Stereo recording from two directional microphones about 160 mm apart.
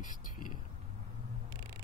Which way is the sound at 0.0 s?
55° left (ahead or behind).